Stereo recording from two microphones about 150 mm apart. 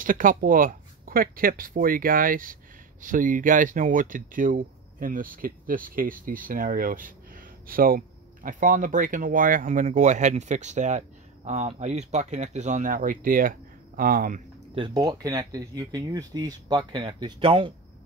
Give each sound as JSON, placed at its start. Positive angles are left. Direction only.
{"t": 0.0, "sound": "speech", "side_deg": -65}
{"t": 14.8, "sound": "speech", "side_deg": -25}